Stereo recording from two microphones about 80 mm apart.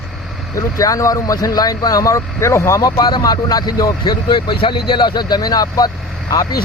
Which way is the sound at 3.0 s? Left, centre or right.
Left.